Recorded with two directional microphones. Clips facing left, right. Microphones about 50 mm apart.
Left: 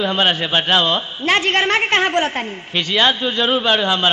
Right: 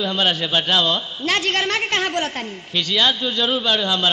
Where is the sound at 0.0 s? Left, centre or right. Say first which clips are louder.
Left 3 dB; left.